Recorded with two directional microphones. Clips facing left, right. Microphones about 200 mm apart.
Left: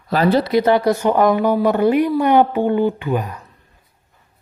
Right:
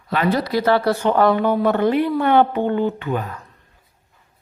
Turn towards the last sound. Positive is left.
turn(degrees=15)  # may be behind; listen again after turning